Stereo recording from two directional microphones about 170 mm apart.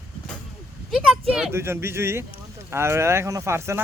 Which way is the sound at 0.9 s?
Centre (ahead or behind).